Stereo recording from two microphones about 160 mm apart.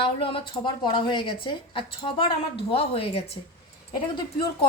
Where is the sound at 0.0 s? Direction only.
35° left (ahead or behind).